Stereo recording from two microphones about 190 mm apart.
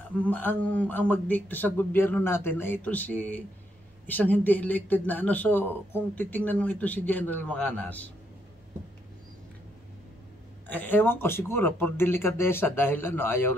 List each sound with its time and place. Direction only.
0.2 s speech: 10° left (ahead or behind)
10.7 s speech: 10° left (ahead or behind)